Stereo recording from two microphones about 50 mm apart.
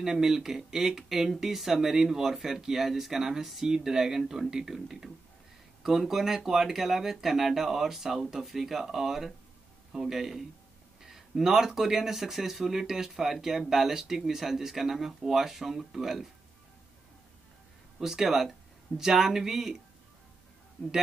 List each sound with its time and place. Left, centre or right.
0.0 s speech: centre
17.9 s speech: centre